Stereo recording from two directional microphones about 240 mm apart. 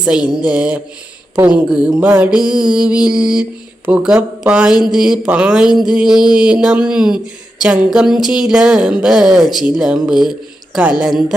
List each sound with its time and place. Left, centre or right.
0.0 s speech: centre